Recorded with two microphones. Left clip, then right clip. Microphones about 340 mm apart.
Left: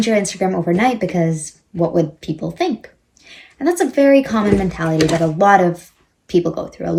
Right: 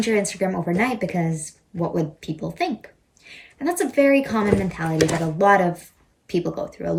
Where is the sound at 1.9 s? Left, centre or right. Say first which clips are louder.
Left 8 dB; centre.